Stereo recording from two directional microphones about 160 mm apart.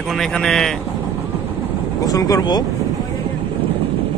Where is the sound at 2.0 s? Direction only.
20° left (ahead or behind).